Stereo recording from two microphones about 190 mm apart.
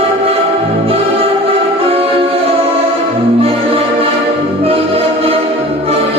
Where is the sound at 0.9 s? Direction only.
30° right (ahead or behind).